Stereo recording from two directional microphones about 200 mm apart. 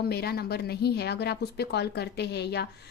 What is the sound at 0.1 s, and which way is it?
Speech, 50° left (ahead or behind).